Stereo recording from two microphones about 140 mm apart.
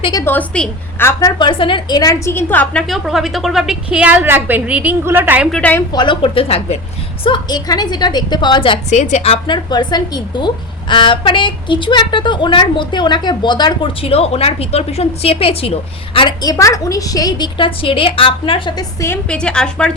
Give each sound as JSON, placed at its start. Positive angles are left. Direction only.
{"t": 0.0, "sound": "a woman's voice", "side_deg": 30}
{"t": 0.3, "sound": "a woman's voice", "side_deg": 10}
{"t": 1.4, "sound": "a woman's voice", "side_deg": 35}
{"t": 2.8, "sound": "a woman's voice", "side_deg": 0}
{"t": 5.5, "sound": "a woman's voice", "side_deg": 10}
{"t": 5.9, "sound": "a woman's voice", "side_deg": 35}
{"t": 7.3, "sound": "a woman's voice", "side_deg": 30}
{"t": 8.9, "sound": "a woman's voice", "side_deg": 55}
{"t": 14.0, "sound": "a woman's voice", "side_deg": 45}
{"t": 18.8, "sound": "a woman's voice", "side_deg": 20}
{"t": 19.3, "sound": "a woman's voice", "side_deg": 5}